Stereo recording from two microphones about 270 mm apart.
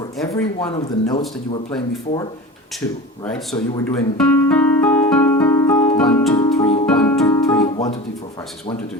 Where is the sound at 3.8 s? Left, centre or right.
Centre.